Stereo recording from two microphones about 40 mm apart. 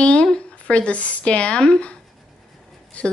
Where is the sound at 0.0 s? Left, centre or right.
Left.